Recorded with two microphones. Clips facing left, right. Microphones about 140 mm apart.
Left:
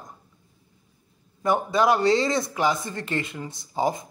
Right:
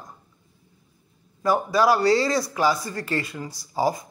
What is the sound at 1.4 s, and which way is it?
A man's voice, 20° left (ahead or behind).